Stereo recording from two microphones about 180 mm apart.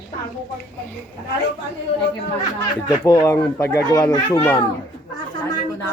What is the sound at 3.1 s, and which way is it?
A child's voice, 15° left (ahead or behind).